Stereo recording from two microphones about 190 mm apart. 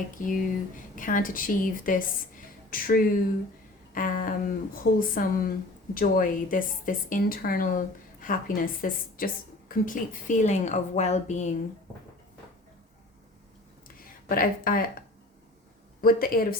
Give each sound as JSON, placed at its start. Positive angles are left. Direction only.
{"t": 0.2, "sound": "a woman's voice", "side_deg": 45}
{"t": 13.8, "sound": "a sound", "side_deg": 50}
{"t": 16.0, "sound": "speech", "side_deg": 50}